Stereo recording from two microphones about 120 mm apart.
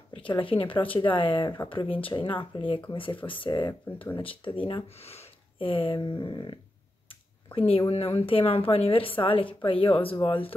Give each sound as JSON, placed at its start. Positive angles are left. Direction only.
{"t": 0.1, "sound": "speech", "side_deg": 45}
{"t": 4.8, "sound": "speech", "side_deg": 60}